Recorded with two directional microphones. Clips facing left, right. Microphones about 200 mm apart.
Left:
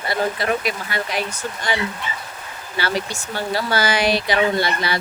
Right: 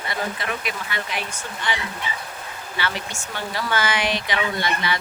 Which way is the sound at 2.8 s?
35° left (ahead or behind).